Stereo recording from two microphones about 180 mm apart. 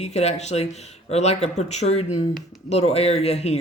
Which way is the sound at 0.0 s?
35° left (ahead or behind).